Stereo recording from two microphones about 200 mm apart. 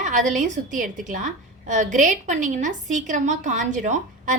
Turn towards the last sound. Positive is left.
turn(degrees=-40)  # may be behind; listen again after turning